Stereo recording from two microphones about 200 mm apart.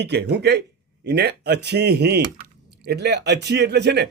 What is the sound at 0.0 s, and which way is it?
A man's voice, 60° right (ahead or behind).